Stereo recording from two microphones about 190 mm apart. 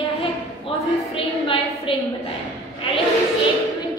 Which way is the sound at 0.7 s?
25° left (ahead or behind).